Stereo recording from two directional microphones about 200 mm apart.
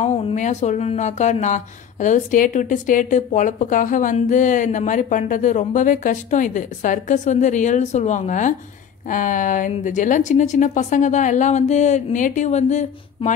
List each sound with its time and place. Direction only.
0.0 s a woman's voice: 35° left (ahead or behind)